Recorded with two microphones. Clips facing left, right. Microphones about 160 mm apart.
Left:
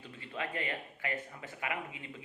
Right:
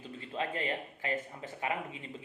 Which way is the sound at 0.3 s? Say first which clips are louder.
Right 3 dB; 30° right (ahead or behind).